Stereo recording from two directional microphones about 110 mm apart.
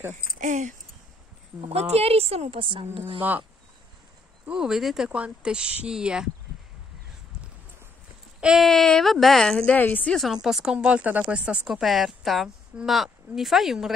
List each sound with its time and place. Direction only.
1.6 s a woman's voice: 70° right (ahead or behind)
3.2 s speech: 15° right (ahead or behind)
4.5 s speech: 5° right (ahead or behind)
8.4 s speech: 5° right (ahead or behind); by 10.1 s 15° left (ahead or behind)
10.1 s speech: centre (ahead or behind)